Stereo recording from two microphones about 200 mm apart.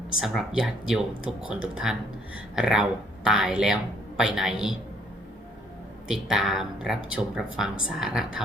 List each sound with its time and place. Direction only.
0.2 s speech: centre (ahead or behind)
6.1 s speech: centre (ahead or behind)